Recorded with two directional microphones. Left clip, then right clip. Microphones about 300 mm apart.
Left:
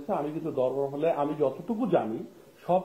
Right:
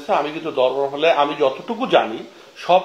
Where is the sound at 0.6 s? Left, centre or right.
Right.